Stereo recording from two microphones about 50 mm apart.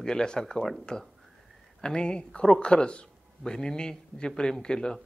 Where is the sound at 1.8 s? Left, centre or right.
Centre.